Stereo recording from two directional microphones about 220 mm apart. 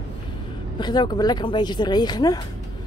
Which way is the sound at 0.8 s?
20° left (ahead or behind).